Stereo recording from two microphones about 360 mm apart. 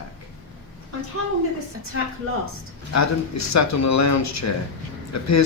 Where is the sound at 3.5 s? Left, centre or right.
Left.